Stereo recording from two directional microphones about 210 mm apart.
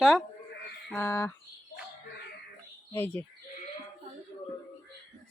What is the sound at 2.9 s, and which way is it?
Speech, 10° left (ahead or behind).